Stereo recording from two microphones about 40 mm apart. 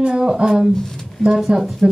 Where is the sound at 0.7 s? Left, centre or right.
Centre.